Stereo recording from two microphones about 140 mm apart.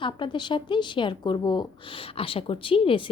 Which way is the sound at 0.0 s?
35° left (ahead or behind).